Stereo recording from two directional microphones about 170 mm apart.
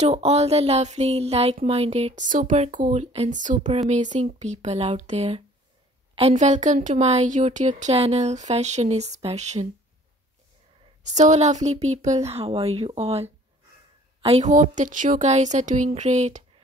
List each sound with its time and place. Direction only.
0.0 s speech: 40° right (ahead or behind)
11.1 s speech: 45° right (ahead or behind)